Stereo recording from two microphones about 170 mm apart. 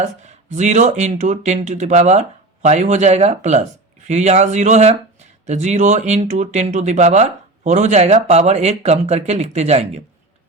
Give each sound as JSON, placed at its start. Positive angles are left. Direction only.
{"t": 0.0, "sound": "speech", "side_deg": -40}